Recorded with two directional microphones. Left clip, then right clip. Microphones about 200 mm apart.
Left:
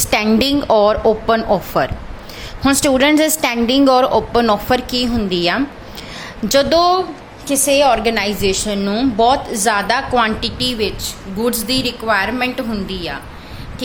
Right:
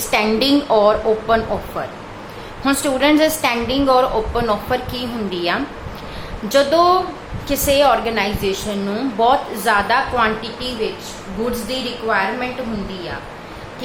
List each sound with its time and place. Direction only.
0.3 s a woman's voice: 40° left (ahead or behind)
7.4 s a woman's voice: 30° left (ahead or behind); by 12.5 s 60° left (ahead or behind)